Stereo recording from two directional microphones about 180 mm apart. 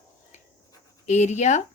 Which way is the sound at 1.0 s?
40° left (ahead or behind).